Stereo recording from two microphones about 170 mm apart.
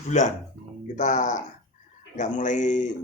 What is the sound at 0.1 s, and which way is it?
Speech, 45° left (ahead or behind).